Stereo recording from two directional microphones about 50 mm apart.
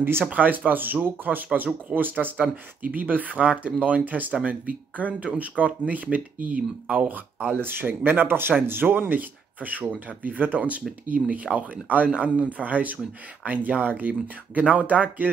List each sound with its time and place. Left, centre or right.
0.3 s speech: right
4.3 s speech: right
5.4 s speech: right
7.6 s speech: right